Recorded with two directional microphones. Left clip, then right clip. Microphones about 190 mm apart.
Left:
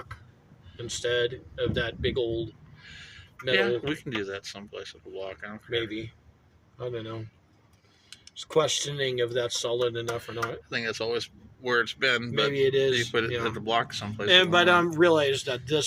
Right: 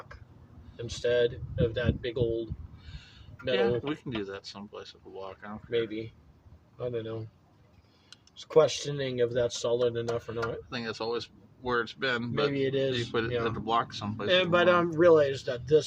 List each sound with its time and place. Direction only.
0.9 s speech: 15° right (ahead or behind)
2.8 s a sound: centre (ahead or behind)
3.5 s speech: 5° left (ahead or behind)
5.7 s speech: 15° right (ahead or behind)
8.4 s speech: 20° right (ahead or behind)
10.3 s speech: centre (ahead or behind)
12.5 s speech: 10° right (ahead or behind)
12.9 s speech: 10° left (ahead or behind)
14.3 s speech: 15° right (ahead or behind)